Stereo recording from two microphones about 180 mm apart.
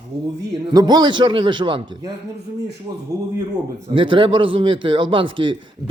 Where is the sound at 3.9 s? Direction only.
25° right (ahead or behind).